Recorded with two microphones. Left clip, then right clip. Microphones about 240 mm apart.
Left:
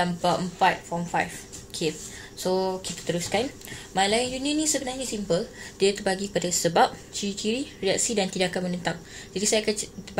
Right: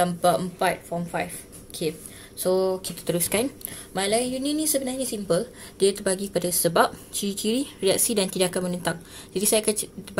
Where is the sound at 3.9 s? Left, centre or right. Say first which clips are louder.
Left 1 dB; centre.